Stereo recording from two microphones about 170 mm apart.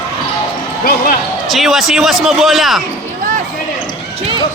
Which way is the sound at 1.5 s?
Centre (ahead or behind).